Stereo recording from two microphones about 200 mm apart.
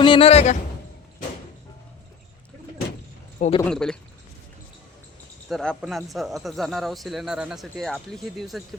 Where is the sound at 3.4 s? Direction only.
30° left (ahead or behind).